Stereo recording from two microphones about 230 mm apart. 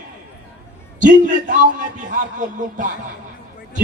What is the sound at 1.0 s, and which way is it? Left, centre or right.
A man's voice, right.